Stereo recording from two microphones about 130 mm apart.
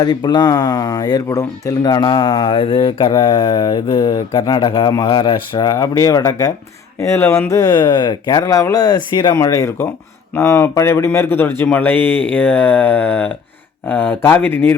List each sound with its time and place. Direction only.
0.0 s speech: 35° left (ahead or behind)
4.3 s speech: 40° left (ahead or behind); by 14.8 s 15° left (ahead or behind)